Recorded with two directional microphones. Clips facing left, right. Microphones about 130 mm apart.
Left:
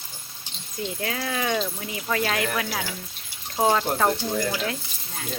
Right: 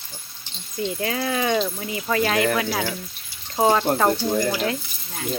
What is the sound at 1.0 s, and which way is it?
Speech, 5° right (ahead or behind).